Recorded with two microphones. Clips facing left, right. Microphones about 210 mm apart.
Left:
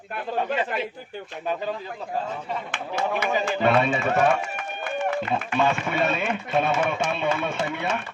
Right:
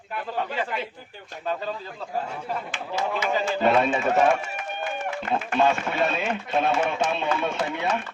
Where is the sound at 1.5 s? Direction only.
15° left (ahead or behind).